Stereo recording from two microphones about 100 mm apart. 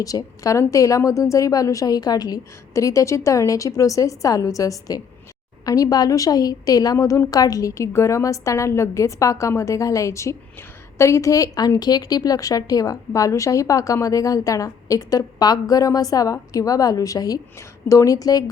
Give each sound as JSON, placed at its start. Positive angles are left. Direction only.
{"t": 0.0, "sound": "a woman's voice", "side_deg": 35}